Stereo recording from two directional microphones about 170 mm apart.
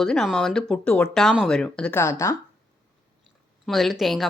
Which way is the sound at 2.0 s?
15° left (ahead or behind).